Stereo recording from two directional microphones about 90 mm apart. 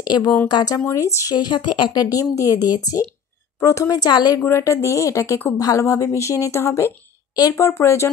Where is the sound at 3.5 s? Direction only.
35° left (ahead or behind).